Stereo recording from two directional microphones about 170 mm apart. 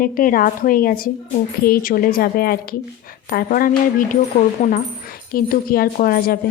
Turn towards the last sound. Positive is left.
turn(degrees=60)  # may be behind; listen again after turning